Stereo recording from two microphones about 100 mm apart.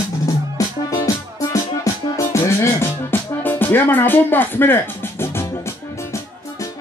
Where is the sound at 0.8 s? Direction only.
35° left (ahead or behind).